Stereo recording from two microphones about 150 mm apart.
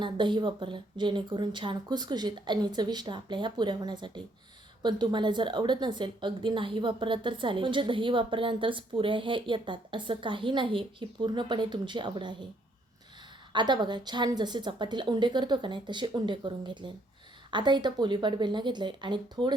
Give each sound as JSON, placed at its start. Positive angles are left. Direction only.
{"t": 0.0, "sound": "a woman's voice", "side_deg": -30}
{"t": 13.5, "sound": "a woman's voice", "side_deg": -30}